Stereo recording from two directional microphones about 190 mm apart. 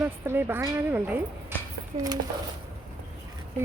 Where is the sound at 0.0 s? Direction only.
10° right (ahead or behind).